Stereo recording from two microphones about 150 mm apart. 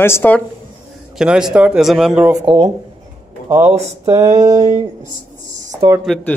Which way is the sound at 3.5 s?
15° right (ahead or behind).